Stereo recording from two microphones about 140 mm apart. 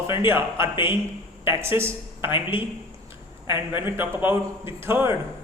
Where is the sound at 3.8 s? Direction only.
15° right (ahead or behind).